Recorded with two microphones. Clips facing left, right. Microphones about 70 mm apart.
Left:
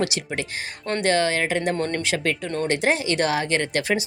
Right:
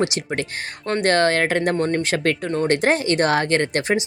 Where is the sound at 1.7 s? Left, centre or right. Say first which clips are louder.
Right 4 dB; right.